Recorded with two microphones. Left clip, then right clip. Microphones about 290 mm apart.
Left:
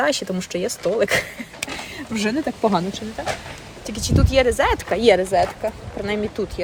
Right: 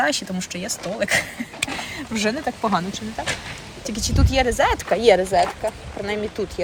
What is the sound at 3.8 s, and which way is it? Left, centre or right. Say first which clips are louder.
Speech: left 2 dB; centre.